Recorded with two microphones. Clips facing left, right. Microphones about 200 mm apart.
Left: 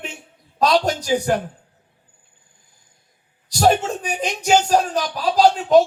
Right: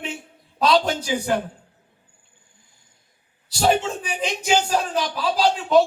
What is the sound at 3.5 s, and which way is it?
Speech, 45° left (ahead or behind).